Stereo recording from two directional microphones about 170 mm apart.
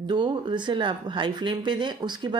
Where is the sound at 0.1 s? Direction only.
25° right (ahead or behind).